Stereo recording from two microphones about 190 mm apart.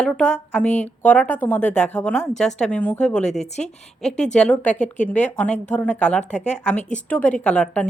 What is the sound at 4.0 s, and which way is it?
A woman's voice, centre (ahead or behind).